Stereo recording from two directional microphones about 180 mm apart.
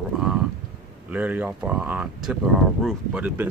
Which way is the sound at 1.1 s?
10° right (ahead or behind).